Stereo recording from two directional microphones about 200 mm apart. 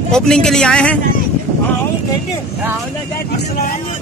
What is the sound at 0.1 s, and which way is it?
Speech, 5° left (ahead or behind).